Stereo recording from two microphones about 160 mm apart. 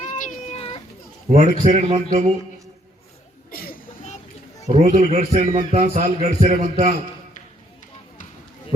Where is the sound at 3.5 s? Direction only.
70° left (ahead or behind).